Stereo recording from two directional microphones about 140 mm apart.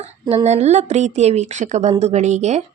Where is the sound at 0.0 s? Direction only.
50° right (ahead or behind).